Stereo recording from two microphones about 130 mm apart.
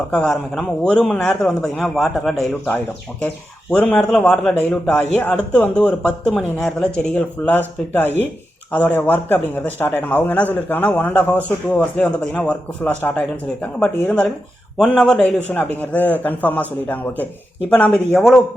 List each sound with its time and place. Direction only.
0.1 s a man's voice: 10° left (ahead or behind)